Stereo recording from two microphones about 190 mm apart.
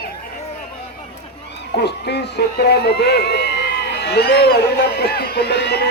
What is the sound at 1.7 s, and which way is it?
Speech, 60° left (ahead or behind).